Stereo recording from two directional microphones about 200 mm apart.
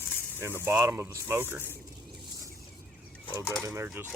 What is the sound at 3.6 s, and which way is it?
Speech, 10° right (ahead or behind).